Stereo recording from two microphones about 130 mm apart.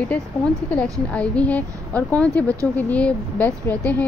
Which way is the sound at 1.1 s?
10° left (ahead or behind).